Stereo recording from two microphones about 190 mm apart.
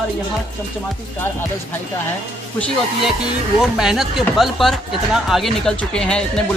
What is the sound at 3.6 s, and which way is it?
Speech, centre (ahead or behind).